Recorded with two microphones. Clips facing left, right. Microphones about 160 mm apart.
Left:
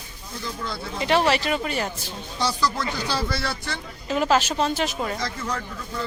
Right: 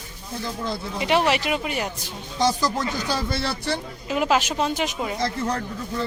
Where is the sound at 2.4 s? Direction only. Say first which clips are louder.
Right 3 dB; 45° right (ahead or behind).